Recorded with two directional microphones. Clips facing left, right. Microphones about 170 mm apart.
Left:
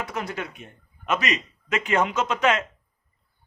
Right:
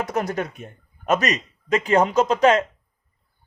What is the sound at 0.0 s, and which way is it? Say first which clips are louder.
Speech: right 6 dB; 45° right (ahead or behind).